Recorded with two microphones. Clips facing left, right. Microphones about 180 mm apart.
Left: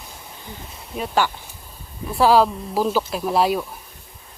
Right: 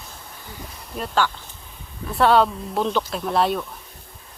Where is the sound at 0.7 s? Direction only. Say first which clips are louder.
Left 2 dB; centre (ahead or behind).